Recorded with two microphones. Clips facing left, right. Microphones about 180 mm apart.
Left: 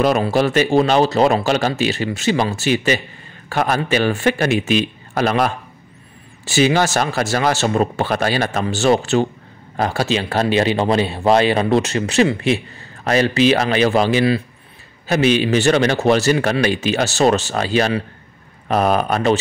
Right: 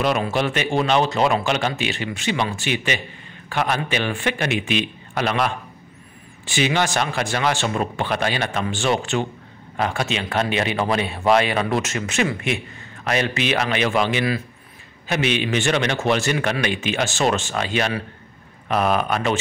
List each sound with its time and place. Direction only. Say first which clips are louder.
0.0 s a man's voice: left 5 dB; 40° left (ahead or behind)